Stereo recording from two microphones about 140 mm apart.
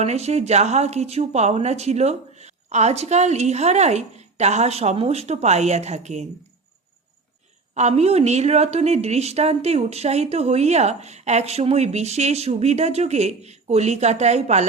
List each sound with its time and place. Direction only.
0.0 s a woman's voice: 50° right (ahead or behind)
7.8 s a woman's voice: 55° right (ahead or behind)